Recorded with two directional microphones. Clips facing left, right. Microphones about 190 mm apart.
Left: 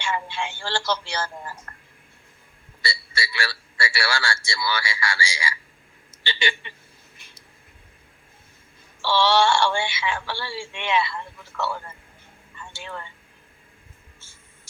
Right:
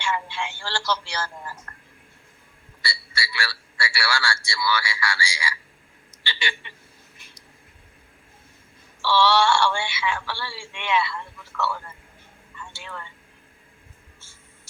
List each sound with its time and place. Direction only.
0.0 s speech: 20° left (ahead or behind)
2.8 s speech: 20° left (ahead or behind)
9.0 s speech: 20° left (ahead or behind)